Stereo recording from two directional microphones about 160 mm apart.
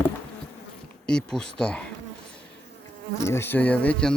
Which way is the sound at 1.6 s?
5° left (ahead or behind).